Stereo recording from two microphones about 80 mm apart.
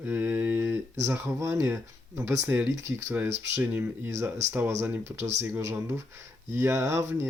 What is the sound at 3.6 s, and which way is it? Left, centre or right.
Speech, right.